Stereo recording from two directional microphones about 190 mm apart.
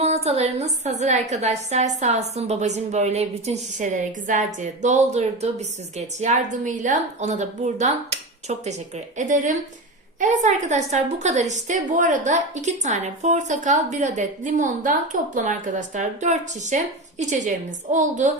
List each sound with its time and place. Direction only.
0.0 s a woman's voice: 35° right (ahead or behind)